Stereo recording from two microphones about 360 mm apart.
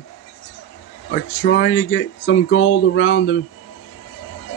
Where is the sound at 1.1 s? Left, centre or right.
Left.